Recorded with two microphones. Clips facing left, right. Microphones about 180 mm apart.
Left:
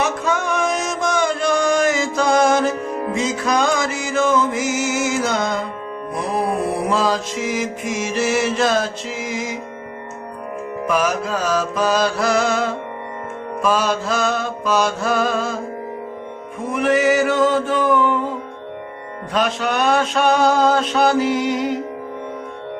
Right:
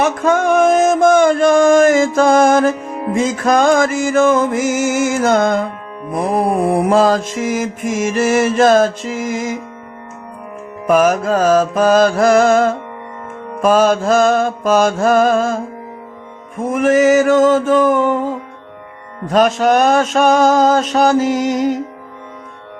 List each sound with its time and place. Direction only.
0.0 s music: 50° right (ahead or behind)
6.3 s mantra: 50° right (ahead or behind)
10.8 s mantra: 50° right (ahead or behind)
16.6 s mantra: 45° right (ahead or behind)
19.3 s mantra: 45° right (ahead or behind)